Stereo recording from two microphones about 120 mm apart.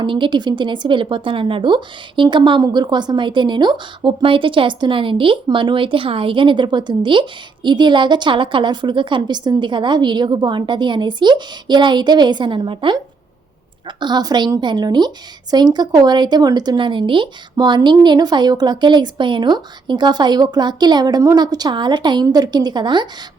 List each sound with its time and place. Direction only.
0.0 s a woman's voice: 40° right (ahead or behind)